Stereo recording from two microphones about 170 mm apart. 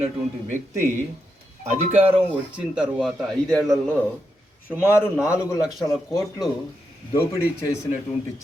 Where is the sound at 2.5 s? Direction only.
5° right (ahead or behind).